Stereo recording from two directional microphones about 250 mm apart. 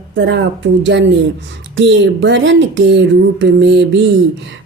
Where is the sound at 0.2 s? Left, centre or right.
Right.